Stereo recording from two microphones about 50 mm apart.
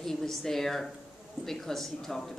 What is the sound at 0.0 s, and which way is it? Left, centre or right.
A woman's voice, centre.